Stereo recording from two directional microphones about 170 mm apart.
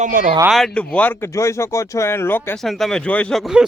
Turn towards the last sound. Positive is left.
turn(degrees=0)  # may be behind; listen again after turning